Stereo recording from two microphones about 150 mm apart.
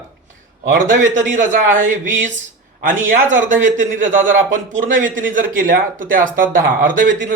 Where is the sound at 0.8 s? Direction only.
55° right (ahead or behind).